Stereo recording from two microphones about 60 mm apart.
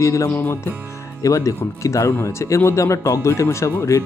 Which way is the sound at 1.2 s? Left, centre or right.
Left.